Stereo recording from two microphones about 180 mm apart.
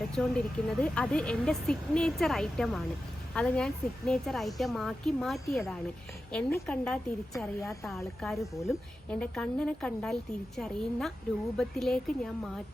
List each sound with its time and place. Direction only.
0.1 s speech: 5° left (ahead or behind)
7.3 s a woman's voice: 15° left (ahead or behind)
7.9 s speech: centre (ahead or behind)